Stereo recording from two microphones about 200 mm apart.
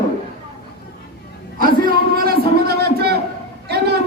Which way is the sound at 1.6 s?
45° right (ahead or behind).